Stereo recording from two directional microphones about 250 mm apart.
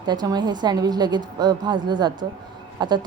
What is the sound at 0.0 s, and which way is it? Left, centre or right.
A woman's voice, centre.